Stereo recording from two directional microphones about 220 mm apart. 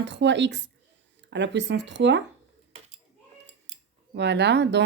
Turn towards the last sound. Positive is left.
turn(degrees=-50)  # may be behind; listen again after turning